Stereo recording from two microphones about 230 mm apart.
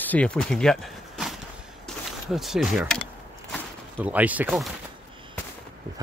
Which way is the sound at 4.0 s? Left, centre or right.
Centre.